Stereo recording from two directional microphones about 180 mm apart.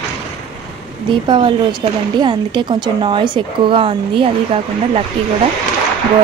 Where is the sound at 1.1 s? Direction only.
25° right (ahead or behind).